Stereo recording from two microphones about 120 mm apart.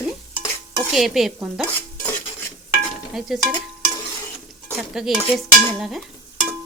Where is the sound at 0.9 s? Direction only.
Centre (ahead or behind).